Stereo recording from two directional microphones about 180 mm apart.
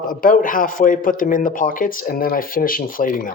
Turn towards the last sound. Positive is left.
turn(degrees=50)  # may be behind; listen again after turning